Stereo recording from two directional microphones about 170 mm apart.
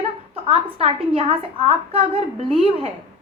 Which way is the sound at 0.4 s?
35° right (ahead or behind).